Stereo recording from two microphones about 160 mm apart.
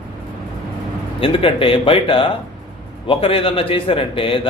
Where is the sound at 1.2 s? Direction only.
35° left (ahead or behind).